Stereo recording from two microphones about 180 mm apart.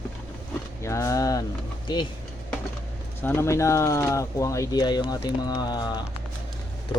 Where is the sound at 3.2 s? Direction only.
10° left (ahead or behind).